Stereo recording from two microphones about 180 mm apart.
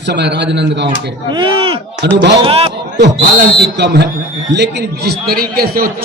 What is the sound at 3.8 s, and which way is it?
A man's voice, 70° right (ahead or behind).